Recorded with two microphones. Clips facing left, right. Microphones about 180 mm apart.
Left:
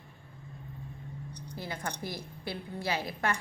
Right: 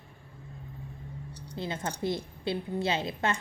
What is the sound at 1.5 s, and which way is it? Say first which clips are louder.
A woman's voice: right 4 dB; 25° right (ahead or behind).